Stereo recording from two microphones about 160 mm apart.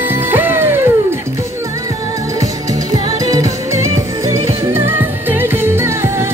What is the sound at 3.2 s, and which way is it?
Music, 20° right (ahead or behind).